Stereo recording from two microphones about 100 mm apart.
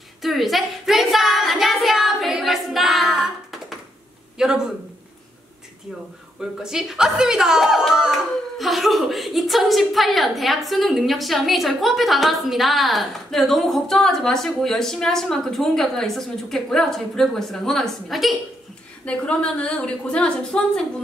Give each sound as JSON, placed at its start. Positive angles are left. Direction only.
{"t": 0.2, "sound": "speech", "side_deg": 0}
{"t": 6.6, "sound": "a woman's voice", "side_deg": -5}